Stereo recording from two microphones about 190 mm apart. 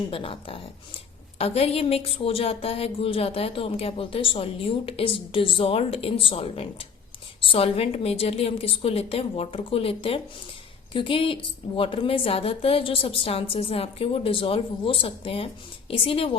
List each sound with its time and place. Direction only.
0.1 s a woman's voice: 30° left (ahead or behind)